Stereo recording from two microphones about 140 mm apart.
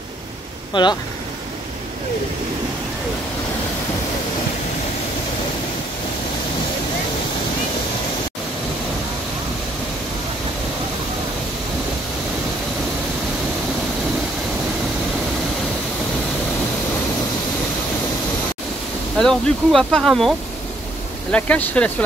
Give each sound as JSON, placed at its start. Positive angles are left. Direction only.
{"t": 0.7, "sound": "speech", "side_deg": 35}
{"t": 19.1, "sound": "speech", "side_deg": 0}